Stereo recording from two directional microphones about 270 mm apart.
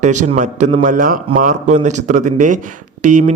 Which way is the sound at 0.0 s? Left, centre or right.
Right.